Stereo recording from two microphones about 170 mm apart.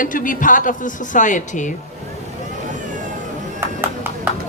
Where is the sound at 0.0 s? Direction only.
50° left (ahead or behind).